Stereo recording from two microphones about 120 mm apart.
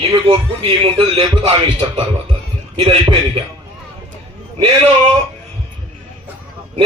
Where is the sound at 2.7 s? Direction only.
45° right (ahead or behind).